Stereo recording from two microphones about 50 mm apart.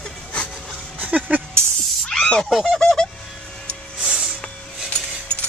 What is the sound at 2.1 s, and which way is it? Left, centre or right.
Fowl, centre.